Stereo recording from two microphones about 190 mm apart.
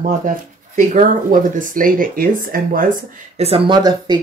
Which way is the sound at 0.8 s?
40° right (ahead or behind).